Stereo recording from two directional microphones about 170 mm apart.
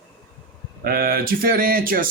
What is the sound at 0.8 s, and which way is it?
Speech, 60° right (ahead or behind).